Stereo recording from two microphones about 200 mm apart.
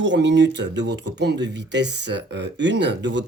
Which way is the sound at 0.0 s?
65° right (ahead or behind).